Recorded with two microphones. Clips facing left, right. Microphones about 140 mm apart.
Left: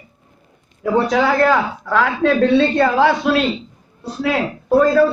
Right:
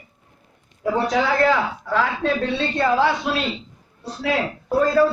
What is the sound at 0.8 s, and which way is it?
A man's voice, 60° left (ahead or behind).